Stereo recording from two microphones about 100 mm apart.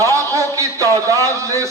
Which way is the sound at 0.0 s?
35° right (ahead or behind).